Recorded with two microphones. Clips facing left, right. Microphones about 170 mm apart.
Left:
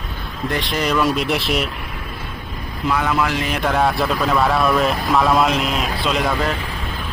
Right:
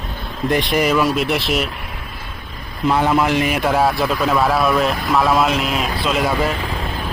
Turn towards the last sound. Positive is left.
turn(degrees=-5)  # may be behind; listen again after turning